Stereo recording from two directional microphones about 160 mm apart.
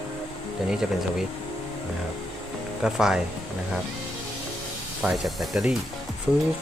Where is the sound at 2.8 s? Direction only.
5° right (ahead or behind).